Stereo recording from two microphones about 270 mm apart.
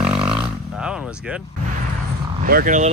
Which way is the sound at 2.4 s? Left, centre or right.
Right.